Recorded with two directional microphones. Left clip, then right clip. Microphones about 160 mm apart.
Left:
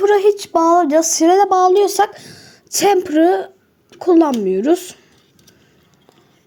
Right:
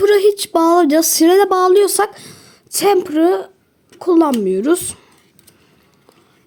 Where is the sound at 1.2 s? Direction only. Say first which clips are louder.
Right 2 dB; 65° right (ahead or behind).